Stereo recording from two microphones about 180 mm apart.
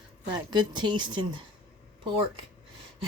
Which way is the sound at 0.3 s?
25° right (ahead or behind).